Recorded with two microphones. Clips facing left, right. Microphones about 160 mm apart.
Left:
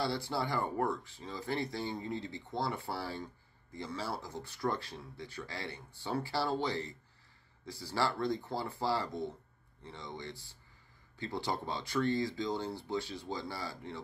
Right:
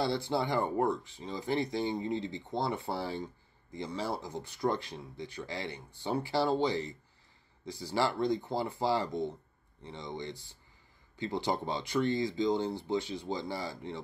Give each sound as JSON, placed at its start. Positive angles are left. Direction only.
{"t": 0.0, "sound": "speech", "side_deg": -20}